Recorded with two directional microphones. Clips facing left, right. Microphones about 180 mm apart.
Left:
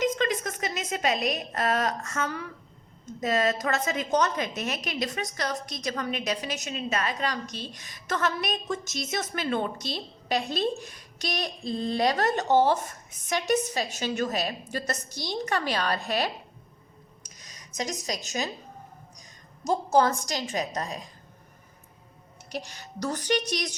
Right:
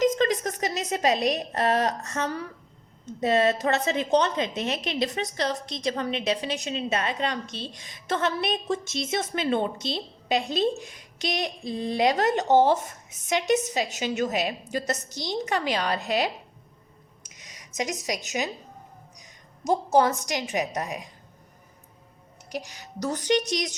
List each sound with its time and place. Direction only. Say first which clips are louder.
0.0 s a woman's voice: right 4 dB; 35° right (ahead or behind); by 16.3 s 15° right (ahead or behind)
17.7 s a woman's voice: right 2 dB; 15° right (ahead or behind)
19.6 s a woman's voice: right 1 dB; 15° right (ahead or behind)
22.4 s a woman's voice: right 1 dB; 15° right (ahead or behind)